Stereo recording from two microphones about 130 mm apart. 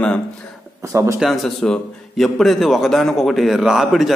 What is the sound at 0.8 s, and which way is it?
Speech, 20° right (ahead or behind).